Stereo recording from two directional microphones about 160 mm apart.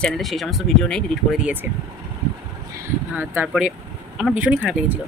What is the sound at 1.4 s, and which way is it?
Speech, 10° right (ahead or behind).